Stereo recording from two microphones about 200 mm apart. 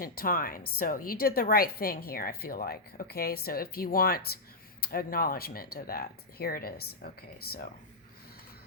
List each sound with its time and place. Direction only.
0.0 s a woman's voice: 45° left (ahead or behind)